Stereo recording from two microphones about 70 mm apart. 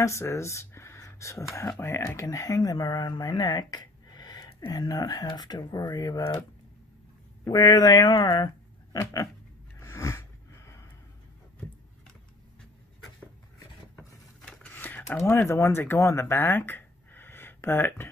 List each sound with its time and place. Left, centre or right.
0.0 s speech: left
1.8 s speech: left
2.0 s speech: left
4.6 s speech: left
5.6 s speech: left
7.4 s speech: left
9.0 s speech: left
9.8 s a sound: left
13.9 s a sound: centre
14.6 s a sound: left
15.3 s speech: left